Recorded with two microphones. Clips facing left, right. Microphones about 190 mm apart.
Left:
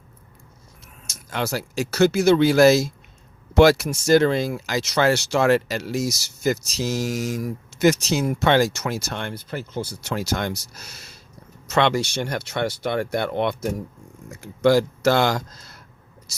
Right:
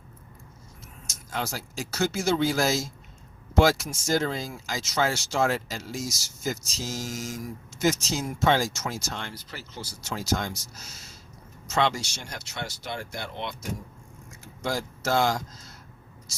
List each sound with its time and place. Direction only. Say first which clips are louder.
1.0 s speech: left 5 dB; 70° left (ahead or behind)